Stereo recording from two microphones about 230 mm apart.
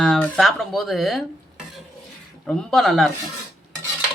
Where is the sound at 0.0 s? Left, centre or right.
Centre.